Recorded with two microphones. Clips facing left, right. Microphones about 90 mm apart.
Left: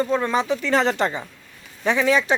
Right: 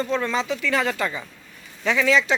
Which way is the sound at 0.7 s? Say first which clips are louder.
Left 4 dB; 30° left (ahead or behind).